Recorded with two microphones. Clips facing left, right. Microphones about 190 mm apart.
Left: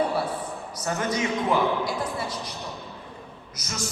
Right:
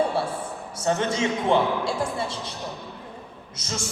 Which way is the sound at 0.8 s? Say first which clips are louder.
Right 3 dB; 25° right (ahead or behind).